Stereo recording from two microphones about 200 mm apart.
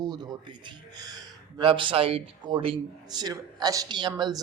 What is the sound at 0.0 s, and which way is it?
Speech, 20° right (ahead or behind).